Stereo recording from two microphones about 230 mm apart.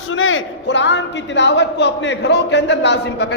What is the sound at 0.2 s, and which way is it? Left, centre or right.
A man's voice, left.